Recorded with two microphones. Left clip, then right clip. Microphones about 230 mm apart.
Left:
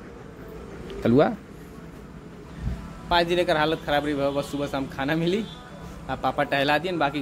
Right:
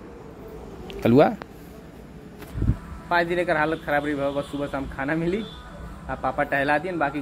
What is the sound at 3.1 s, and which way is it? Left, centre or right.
Speech, centre.